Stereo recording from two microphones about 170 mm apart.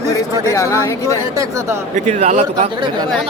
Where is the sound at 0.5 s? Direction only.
15° left (ahead or behind).